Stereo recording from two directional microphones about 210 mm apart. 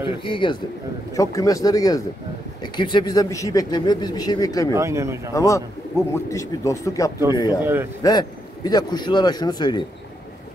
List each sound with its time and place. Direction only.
0.0 s a man's voice: 25° left (ahead or behind)
4.7 s speech: 15° right (ahead or behind)
5.3 s a man's voice: 15° left (ahead or behind)
7.6 s speech: 10° right (ahead or behind)
8.0 s speech: 20° left (ahead or behind)